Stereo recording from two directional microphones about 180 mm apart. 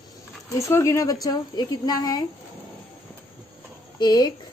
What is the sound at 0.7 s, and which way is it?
A woman's voice, 15° left (ahead or behind).